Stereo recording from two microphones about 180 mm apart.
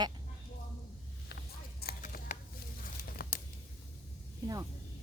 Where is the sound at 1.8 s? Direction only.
55° left (ahead or behind).